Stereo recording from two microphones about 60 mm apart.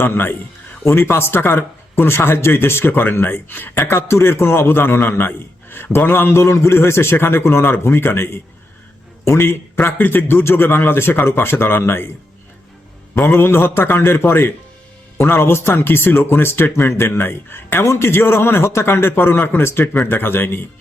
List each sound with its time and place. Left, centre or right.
0.0 s speech: left
3.8 s a man's voice: left
13.1 s speech: left